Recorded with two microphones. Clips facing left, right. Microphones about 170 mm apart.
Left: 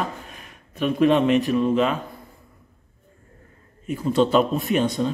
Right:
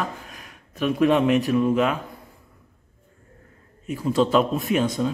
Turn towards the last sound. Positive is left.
turn(degrees=0)  # may be behind; listen again after turning